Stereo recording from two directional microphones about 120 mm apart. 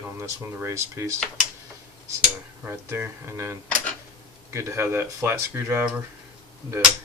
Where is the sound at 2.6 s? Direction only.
20° right (ahead or behind).